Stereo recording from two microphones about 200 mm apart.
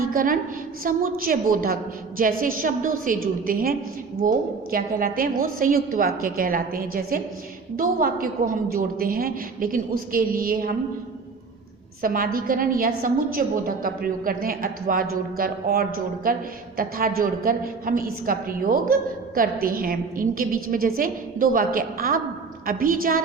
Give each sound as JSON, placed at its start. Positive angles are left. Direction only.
{"t": 0.1, "sound": "a woman's voice", "side_deg": -45}
{"t": 12.0, "sound": "a woman's voice", "side_deg": -45}